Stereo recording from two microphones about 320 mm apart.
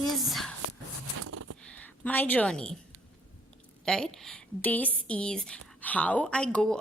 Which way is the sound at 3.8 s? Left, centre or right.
Centre.